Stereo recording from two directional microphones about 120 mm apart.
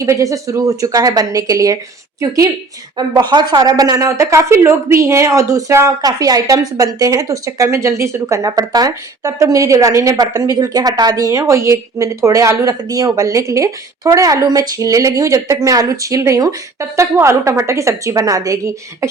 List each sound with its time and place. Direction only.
0.0 s speech: 25° right (ahead or behind)